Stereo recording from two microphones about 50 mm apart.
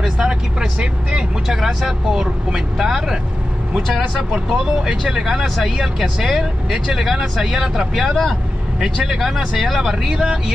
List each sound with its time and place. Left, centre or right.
0.0 s speech: centre
4.2 s speech: centre